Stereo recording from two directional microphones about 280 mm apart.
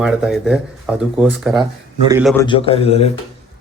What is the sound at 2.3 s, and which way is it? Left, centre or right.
Speech, centre.